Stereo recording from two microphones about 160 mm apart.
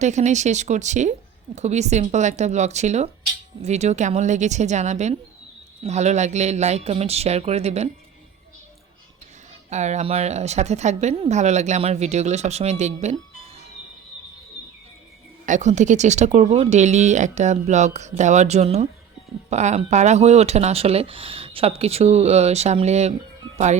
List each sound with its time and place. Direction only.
0.0 s speech: 45° right (ahead or behind)
9.6 s speech: 45° right (ahead or behind)
15.4 s speech: 50° right (ahead or behind)